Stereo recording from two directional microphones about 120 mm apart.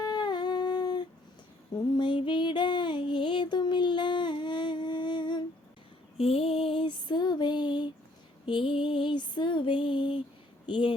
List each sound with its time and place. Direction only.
0.0 s humming: 35° left (ahead or behind)
2.0 s music: 40° left (ahead or behind)
6.1 s female singing: 55° left (ahead or behind)
10.7 s a sound: 40° left (ahead or behind)